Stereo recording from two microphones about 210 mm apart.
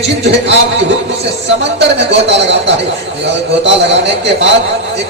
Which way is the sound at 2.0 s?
55° right (ahead or behind).